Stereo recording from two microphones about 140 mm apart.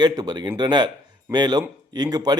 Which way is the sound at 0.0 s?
30° right (ahead or behind).